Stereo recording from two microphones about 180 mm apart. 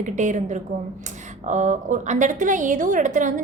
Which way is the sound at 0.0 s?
45° right (ahead or behind).